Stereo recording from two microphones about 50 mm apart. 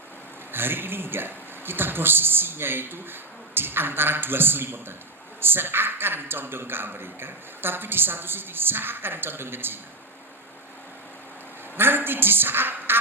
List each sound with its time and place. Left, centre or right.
0.5 s speech: right
11.8 s a woman's voice: right